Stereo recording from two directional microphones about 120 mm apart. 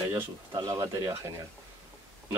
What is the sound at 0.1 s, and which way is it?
Speech, 30° right (ahead or behind).